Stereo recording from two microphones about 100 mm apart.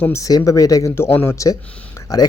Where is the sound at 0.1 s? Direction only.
35° left (ahead or behind).